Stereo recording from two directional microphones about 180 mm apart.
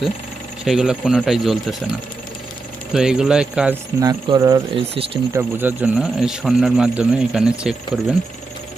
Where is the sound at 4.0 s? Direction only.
20° right (ahead or behind); by 8.0 s 5° right (ahead or behind).